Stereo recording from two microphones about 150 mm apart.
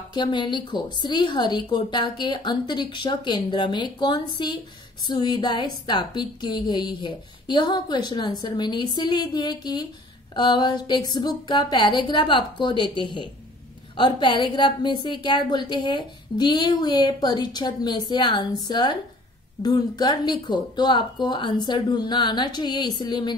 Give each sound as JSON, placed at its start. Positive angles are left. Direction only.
{"t": 0.1, "sound": "a woman's voice", "side_deg": 30}